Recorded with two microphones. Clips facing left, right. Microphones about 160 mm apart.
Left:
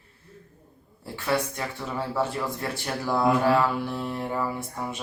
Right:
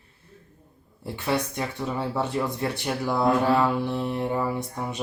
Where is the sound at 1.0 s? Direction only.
20° right (ahead or behind).